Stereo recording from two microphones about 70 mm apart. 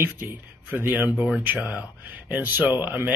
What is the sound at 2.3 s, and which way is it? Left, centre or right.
Speech, right.